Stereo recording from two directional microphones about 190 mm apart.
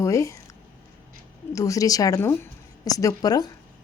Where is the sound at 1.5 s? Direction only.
15° left (ahead or behind).